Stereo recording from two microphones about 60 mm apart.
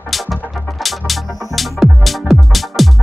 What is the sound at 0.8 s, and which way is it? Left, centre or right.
Music, centre.